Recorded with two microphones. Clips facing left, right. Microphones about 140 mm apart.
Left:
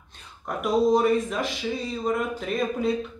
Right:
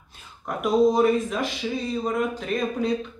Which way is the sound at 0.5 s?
Centre (ahead or behind).